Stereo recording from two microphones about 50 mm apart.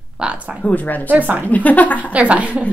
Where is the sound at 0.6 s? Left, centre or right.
Left.